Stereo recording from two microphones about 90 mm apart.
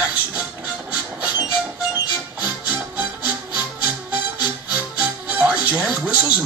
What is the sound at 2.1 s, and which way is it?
Music, 20° right (ahead or behind).